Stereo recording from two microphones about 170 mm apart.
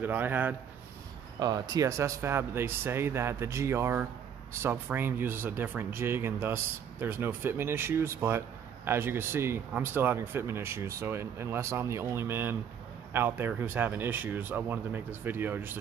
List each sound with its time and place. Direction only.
0.0 s speech: 10° right (ahead or behind)
1.4 s speech: 25° right (ahead or behind)